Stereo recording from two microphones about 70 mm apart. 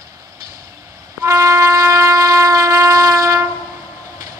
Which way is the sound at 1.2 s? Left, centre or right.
Right.